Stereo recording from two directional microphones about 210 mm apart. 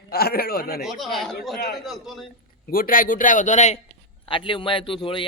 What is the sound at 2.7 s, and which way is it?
A man's voice, 40° left (ahead or behind).